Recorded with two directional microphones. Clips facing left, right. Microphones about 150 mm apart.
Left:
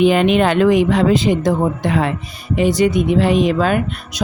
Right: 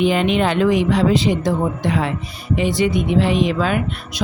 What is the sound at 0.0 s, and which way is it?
A woman's voice, 55° left (ahead or behind).